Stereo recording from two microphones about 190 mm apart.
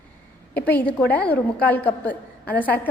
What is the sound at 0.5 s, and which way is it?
A woman's voice, 10° left (ahead or behind).